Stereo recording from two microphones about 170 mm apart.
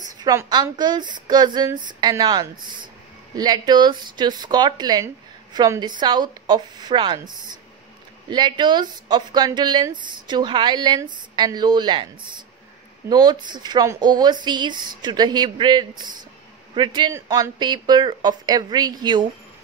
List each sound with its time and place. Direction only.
0.2 s speech: 20° right (ahead or behind)
13.1 s speech: 25° right (ahead or behind)